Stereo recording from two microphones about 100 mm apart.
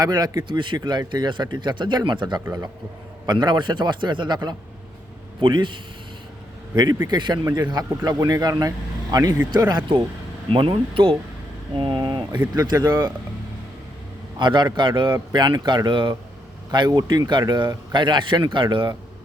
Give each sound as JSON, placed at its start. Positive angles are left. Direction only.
{"t": 0.0, "sound": "speech", "side_deg": -45}
{"t": 0.4, "sound": "speech", "side_deg": -55}
{"t": 2.4, "sound": "speech", "side_deg": -35}
{"t": 3.2, "sound": "speech", "side_deg": -50}
{"t": 7.1, "sound": "speech", "side_deg": -45}
{"t": 14.3, "sound": "speech", "side_deg": -50}